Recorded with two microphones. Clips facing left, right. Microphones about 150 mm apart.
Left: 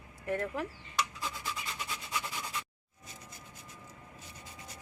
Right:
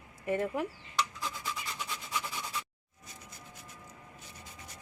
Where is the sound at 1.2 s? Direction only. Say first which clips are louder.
Right 1 dB; 5° left (ahead or behind).